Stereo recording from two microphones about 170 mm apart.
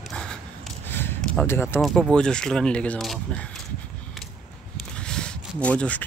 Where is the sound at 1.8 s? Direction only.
Centre (ahead or behind).